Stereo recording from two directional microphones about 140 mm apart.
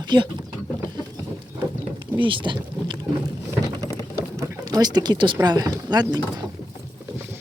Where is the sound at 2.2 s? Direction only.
35° right (ahead or behind).